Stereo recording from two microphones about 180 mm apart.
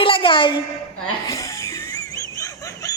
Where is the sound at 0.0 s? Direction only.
30° left (ahead or behind).